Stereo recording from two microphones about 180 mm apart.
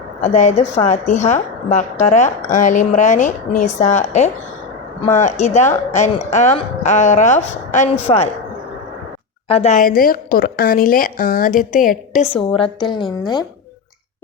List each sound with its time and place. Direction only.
0.2 s a woman's voice: 40° left (ahead or behind)
8.1 s a woman's voice: 30° left (ahead or behind)
9.5 s a woman's voice: 35° left (ahead or behind)
12.5 s a woman's voice: 25° left (ahead or behind)